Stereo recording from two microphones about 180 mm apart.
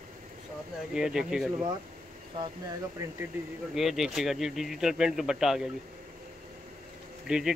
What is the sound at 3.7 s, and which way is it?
Speech, centre (ahead or behind).